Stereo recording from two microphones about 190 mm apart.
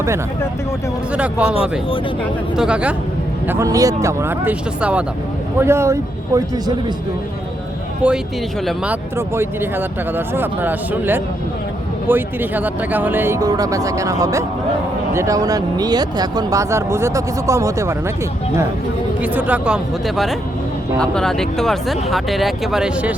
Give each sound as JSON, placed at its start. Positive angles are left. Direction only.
{"t": 1.1, "sound": "speech", "side_deg": -5}
{"t": 2.6, "sound": "speech", "side_deg": -5}
{"t": 8.0, "sound": "speech", "side_deg": -5}
{"t": 19.2, "sound": "speech", "side_deg": -10}